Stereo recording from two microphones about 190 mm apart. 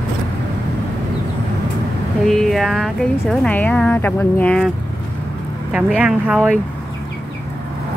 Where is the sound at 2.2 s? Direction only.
Centre (ahead or behind).